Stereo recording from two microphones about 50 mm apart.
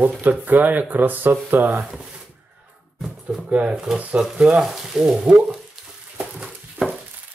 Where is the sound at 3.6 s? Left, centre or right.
Centre.